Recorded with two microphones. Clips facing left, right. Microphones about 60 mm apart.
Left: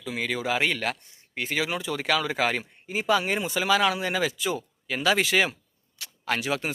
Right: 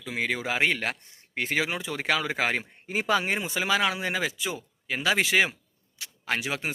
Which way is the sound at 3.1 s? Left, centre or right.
Right.